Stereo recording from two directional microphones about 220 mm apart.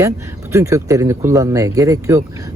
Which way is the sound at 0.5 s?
15° right (ahead or behind).